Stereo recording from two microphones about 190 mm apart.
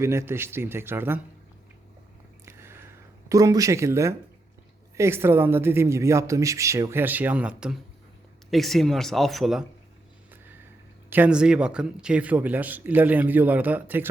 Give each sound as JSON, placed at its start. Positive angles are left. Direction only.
{"t": 0.0, "sound": "a man's voice", "side_deg": -15}
{"t": 2.4, "sound": "a sound", "side_deg": -15}
{"t": 4.9, "sound": "a man's voice", "side_deg": -15}
{"t": 11.1, "sound": "a man's voice", "side_deg": -5}